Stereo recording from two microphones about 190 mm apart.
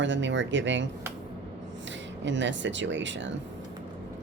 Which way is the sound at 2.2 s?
70° right (ahead or behind).